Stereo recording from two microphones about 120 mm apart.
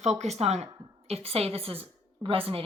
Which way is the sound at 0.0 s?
65° right (ahead or behind).